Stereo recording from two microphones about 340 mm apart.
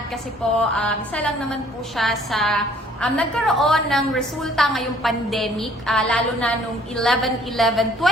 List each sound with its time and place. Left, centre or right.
0.6 s a woman's voice: centre